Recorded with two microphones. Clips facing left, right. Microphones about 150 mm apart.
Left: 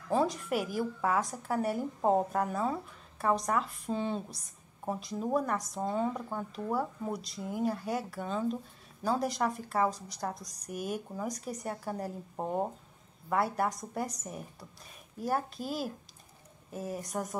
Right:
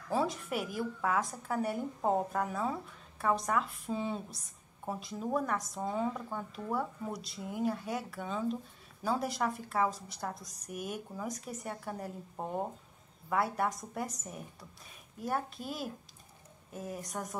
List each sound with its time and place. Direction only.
0.1 s a woman's voice: centre (ahead or behind)
6.1 s a woman's voice: 15° left (ahead or behind)